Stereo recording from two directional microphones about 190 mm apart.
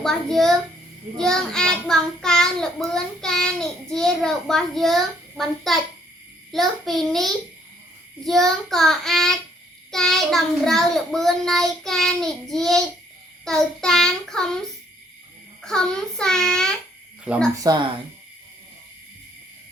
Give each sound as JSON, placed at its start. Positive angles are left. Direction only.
{"t": 0.0, "sound": "child singing", "side_deg": 0}
{"t": 17.5, "sound": "speech", "side_deg": -20}